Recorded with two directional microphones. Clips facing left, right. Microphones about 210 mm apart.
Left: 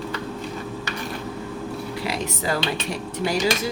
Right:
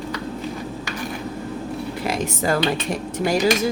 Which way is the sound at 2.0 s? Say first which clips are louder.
Right 4 dB; 45° right (ahead or behind).